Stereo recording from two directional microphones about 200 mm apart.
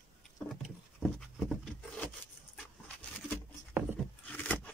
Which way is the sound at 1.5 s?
5° left (ahead or behind).